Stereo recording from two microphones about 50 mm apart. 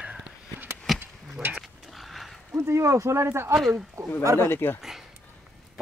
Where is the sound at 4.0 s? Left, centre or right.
Right.